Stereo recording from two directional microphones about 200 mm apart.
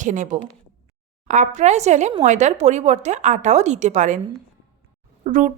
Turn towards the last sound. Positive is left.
turn(degrees=-40)  # may be behind; listen again after turning